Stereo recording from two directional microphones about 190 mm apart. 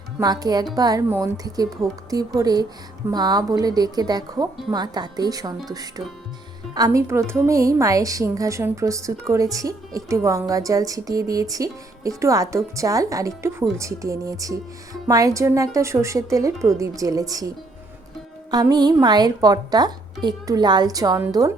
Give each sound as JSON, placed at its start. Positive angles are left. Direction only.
{"t": 0.2, "sound": "speech", "side_deg": -20}
{"t": 6.7, "sound": "a woman's voice", "side_deg": -20}
{"t": 18.5, "sound": "speech", "side_deg": -20}